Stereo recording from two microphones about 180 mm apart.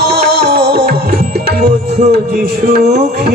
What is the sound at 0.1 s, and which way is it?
Music, 65° right (ahead or behind).